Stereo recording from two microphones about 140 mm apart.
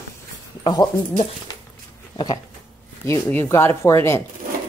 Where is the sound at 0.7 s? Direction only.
30° left (ahead or behind).